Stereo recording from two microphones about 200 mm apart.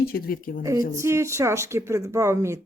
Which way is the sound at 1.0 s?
15° right (ahead or behind).